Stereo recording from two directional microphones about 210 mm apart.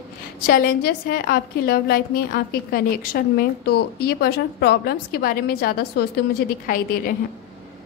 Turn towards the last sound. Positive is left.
turn(degrees=45)  # may be behind; listen again after turning